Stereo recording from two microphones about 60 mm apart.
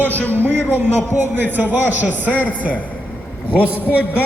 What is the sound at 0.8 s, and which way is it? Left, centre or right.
A man's voice, right.